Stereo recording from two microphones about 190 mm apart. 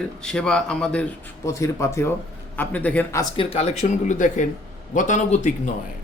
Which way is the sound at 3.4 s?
30° left (ahead or behind).